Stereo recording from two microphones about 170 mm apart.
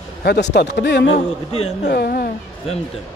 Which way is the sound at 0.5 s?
85° left.